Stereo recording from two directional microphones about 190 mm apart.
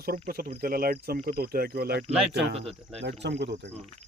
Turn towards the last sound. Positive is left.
turn(degrees=-65)  # may be behind; listen again after turning